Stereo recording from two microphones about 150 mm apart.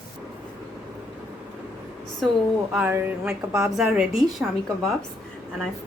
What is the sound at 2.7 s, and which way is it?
A woman's voice, 10° right (ahead or behind).